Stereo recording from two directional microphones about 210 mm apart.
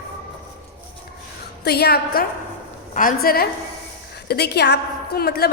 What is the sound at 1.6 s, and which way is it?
A woman's voice, 50° left (ahead or behind).